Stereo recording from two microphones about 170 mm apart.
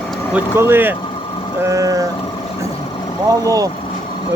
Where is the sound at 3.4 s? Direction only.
20° right (ahead or behind).